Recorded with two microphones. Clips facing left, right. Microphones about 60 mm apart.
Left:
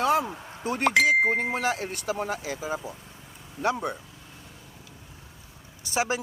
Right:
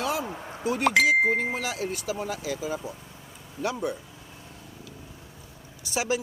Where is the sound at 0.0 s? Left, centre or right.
Left.